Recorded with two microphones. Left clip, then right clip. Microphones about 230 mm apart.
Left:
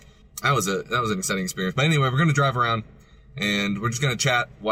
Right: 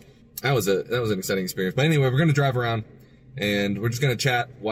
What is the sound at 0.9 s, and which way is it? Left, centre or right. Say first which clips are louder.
Speech: even; right.